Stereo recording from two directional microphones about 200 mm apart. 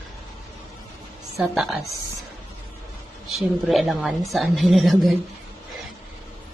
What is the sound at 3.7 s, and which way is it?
A woman's voice, centre (ahead or behind).